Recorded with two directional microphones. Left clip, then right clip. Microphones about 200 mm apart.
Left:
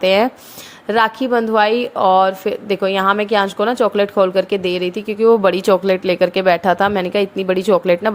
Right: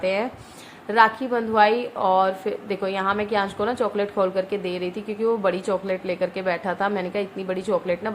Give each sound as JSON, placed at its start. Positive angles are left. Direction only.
{"t": 0.0, "sound": "a woman's voice", "side_deg": 45}